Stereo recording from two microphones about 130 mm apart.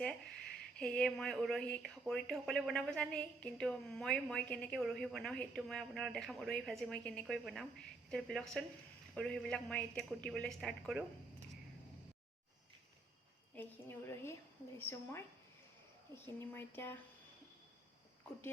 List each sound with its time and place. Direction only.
0.8 s speech: 5° left (ahead or behind)
13.6 s a woman's voice: 20° left (ahead or behind)